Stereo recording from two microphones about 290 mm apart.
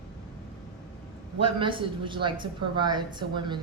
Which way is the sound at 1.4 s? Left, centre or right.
Centre.